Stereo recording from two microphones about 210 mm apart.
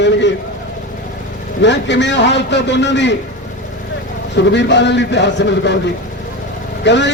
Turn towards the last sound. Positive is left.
turn(degrees=55)  # may be behind; listen again after turning